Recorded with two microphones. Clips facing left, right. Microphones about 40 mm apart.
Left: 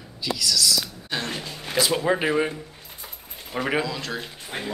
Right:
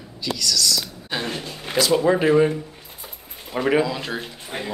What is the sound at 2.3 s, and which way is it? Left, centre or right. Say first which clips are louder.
Speech: right 6 dB; centre.